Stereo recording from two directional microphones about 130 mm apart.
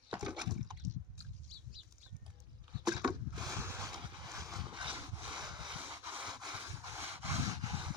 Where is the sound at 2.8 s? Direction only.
30° right (ahead or behind).